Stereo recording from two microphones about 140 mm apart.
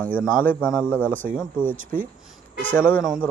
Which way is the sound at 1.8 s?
75° right (ahead or behind).